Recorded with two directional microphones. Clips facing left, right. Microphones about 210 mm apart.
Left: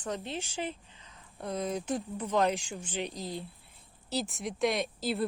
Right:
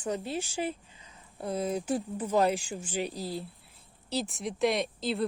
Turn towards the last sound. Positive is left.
turn(degrees=0)  # may be behind; listen again after turning